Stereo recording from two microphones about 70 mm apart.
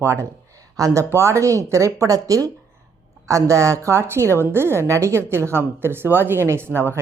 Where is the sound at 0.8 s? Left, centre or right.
Right.